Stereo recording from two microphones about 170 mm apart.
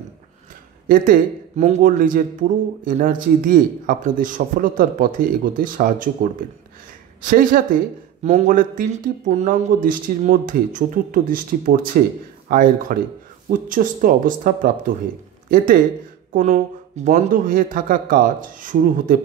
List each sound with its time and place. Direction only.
0.8 s a man's voice: 55° right (ahead or behind)